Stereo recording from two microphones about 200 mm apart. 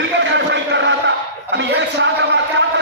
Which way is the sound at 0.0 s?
60° right (ahead or behind).